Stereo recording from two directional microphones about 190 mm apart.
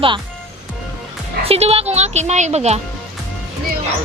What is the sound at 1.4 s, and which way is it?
Speech, 30° right (ahead or behind).